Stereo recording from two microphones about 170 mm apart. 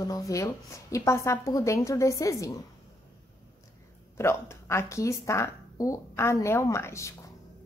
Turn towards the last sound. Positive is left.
turn(degrees=15)  # may be behind; listen again after turning